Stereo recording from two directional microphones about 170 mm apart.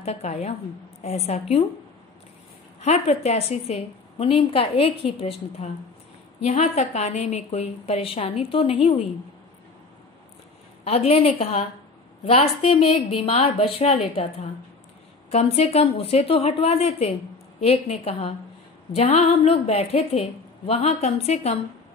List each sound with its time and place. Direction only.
0.0 s a woman's voice: 40° left (ahead or behind)
2.8 s a woman's voice: 40° left (ahead or behind)
10.8 s a woman's voice: 35° left (ahead or behind)